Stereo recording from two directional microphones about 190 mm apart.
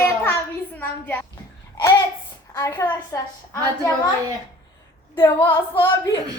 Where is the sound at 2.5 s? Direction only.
15° left (ahead or behind).